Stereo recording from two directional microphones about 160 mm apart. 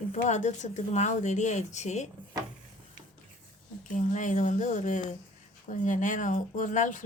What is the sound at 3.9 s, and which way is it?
A woman's voice, 50° left (ahead or behind).